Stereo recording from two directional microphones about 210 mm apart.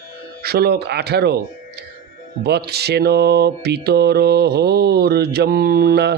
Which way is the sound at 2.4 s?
50° right (ahead or behind).